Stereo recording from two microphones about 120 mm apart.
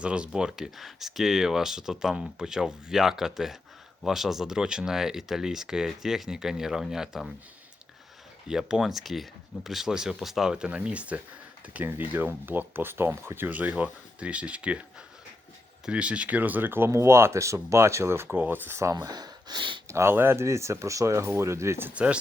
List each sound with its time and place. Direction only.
0.0 s speech: 10° right (ahead or behind)
8.4 s speech: 5° right (ahead or behind)
15.9 s speech: 10° right (ahead or behind); by 19.8 s 40° right (ahead or behind)
19.9 s speech: 20° right (ahead or behind)